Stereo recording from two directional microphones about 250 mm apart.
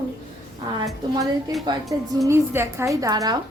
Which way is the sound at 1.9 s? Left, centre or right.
Centre.